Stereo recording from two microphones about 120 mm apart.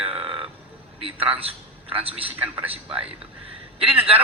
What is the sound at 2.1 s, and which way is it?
Speech, 10° right (ahead or behind).